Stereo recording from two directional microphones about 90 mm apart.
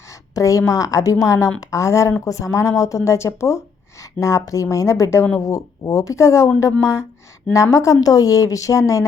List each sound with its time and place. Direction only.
0.1 s speech: 35° left (ahead or behind)